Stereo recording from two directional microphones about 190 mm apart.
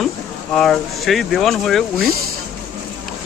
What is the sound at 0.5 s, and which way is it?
Speech, centre (ahead or behind).